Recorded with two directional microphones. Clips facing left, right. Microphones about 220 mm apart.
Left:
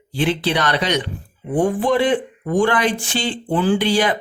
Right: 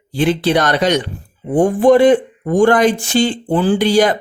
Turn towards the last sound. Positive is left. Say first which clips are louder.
# right 4 dB
turn(degrees=-45)  # may be behind; listen again after turning